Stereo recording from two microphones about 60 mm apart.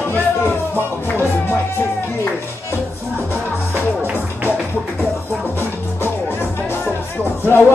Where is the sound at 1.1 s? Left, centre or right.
Left.